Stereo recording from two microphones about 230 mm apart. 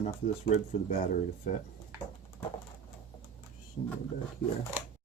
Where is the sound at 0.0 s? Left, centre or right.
Left.